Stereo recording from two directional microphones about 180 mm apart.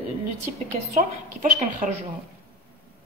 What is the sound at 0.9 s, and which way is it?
Speech, 45° right (ahead or behind).